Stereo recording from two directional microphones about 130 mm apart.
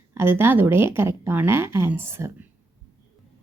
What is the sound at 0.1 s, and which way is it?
Speech, 20° right (ahead or behind).